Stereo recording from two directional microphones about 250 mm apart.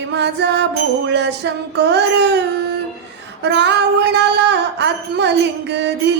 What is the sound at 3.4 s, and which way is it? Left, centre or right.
Music, right.